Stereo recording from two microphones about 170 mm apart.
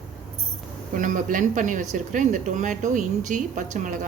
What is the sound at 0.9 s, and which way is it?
Speech, 50° right (ahead or behind).